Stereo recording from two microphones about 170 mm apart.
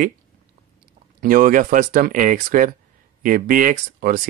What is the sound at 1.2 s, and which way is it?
Speech, 50° right (ahead or behind).